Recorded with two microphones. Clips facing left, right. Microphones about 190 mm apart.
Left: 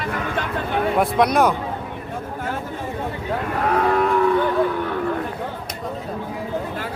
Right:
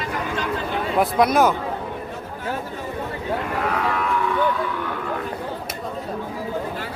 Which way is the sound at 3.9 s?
40° left (ahead or behind).